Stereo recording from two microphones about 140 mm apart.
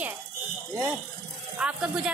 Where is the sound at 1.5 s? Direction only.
5° right (ahead or behind).